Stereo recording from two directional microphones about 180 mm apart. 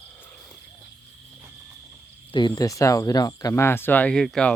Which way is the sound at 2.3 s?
20° left (ahead or behind).